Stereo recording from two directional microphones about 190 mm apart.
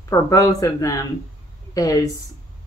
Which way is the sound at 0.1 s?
15° left (ahead or behind).